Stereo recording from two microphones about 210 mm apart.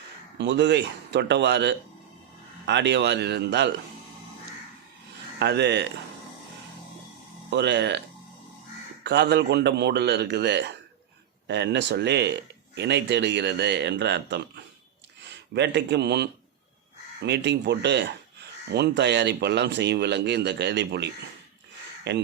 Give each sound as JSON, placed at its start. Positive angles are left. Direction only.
{"t": 0.3, "sound": "speech", "side_deg": -55}
{"t": 5.4, "sound": "speech", "side_deg": -55}
{"t": 7.5, "sound": "speech", "side_deg": -55}
{"t": 9.0, "sound": "speech", "side_deg": -55}